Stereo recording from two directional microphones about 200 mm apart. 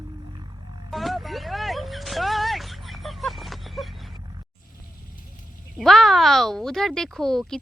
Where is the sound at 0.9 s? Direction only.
Centre (ahead or behind).